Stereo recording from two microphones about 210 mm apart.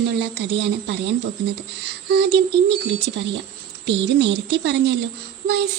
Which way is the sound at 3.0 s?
60° right (ahead or behind).